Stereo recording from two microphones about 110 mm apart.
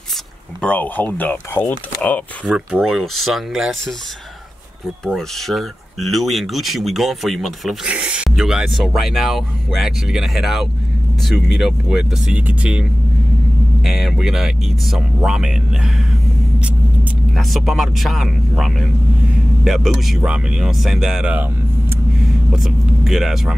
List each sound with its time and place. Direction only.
0.6 s speech: 10° left (ahead or behind)
2.4 s speech: 5° right (ahead or behind)
5.0 s speech: centre (ahead or behind)
7.9 s speech: 10° right (ahead or behind)
13.8 s speech: centre (ahead or behind)
17.4 s speech: centre (ahead or behind)
22.5 s speech: 5° right (ahead or behind)